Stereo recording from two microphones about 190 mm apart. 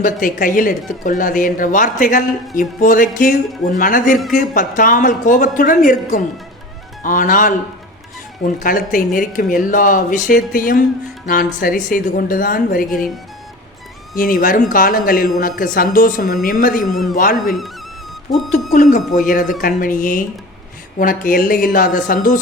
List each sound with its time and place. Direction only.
0.0 s speech: 45° left (ahead or behind)
12.9 s a man's voice: centre (ahead or behind)
14.2 s speech: 45° left (ahead or behind)
16.8 s a man's voice: centre (ahead or behind)
17.2 s speech: 45° left (ahead or behind)
18.3 s speech: centre (ahead or behind)
18.7 s speech: 45° left (ahead or behind)